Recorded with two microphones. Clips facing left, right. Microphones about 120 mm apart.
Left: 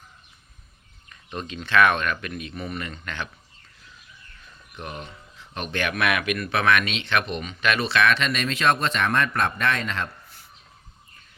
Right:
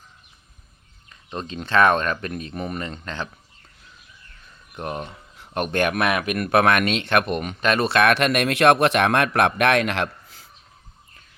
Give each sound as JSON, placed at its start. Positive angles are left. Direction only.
{"t": 1.1, "sound": "a sound", "side_deg": -30}
{"t": 1.5, "sound": "speech", "side_deg": -40}
{"t": 4.7, "sound": "speech", "side_deg": -45}
{"t": 6.4, "sound": "speech", "side_deg": -55}